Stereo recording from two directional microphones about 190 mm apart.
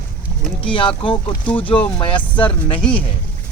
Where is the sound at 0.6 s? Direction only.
25° left (ahead or behind).